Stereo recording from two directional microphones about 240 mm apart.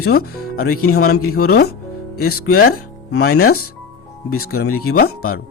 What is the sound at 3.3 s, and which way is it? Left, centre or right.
Speech, left.